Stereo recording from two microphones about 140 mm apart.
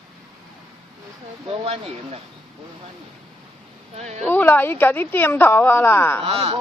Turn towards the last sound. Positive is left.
turn(degrees=-45)  # may be behind; listen again after turning